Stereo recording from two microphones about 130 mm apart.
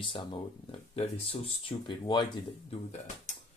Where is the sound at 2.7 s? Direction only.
60° left (ahead or behind).